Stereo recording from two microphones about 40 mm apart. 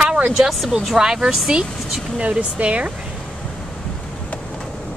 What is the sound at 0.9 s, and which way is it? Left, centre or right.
Speech, centre.